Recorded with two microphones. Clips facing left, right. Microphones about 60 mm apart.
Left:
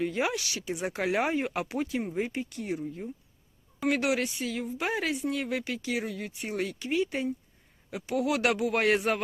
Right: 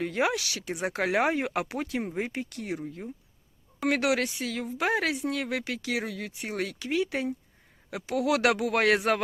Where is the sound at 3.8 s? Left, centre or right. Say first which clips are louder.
Right 1 dB; right.